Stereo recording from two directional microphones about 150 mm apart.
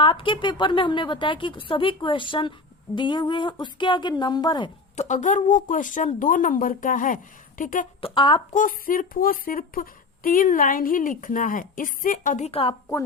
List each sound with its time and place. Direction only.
0.0 s a woman's voice: 35° left (ahead or behind)
4.9 s a woman's voice: 55° left (ahead or behind)
8.0 s a woman's voice: 35° left (ahead or behind)
8.5 s speech: 65° left (ahead or behind)
12.5 s a woman's voice: 40° left (ahead or behind)